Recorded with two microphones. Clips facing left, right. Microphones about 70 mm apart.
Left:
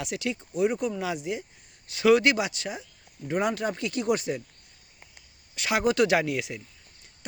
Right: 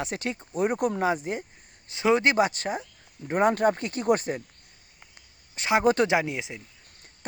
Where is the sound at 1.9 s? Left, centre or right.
Right.